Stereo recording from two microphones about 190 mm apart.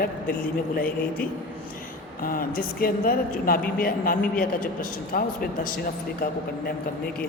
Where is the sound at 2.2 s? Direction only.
50° left (ahead or behind).